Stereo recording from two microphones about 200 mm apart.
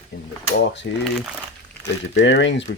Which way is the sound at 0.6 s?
60° left (ahead or behind).